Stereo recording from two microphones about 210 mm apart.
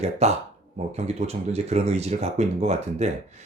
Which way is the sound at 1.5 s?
30° right (ahead or behind).